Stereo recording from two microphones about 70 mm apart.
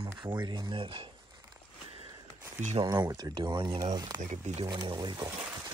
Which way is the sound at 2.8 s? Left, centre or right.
Right.